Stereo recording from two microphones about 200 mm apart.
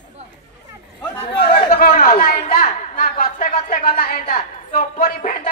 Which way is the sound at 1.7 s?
45° left (ahead or behind).